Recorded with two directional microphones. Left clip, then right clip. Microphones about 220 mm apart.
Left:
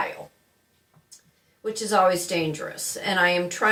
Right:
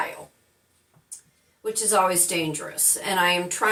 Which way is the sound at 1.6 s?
15° right (ahead or behind).